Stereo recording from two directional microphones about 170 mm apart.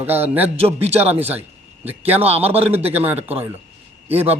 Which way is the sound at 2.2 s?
35° right (ahead or behind).